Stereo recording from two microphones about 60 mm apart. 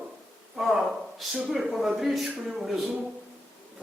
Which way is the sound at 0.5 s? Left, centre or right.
Centre.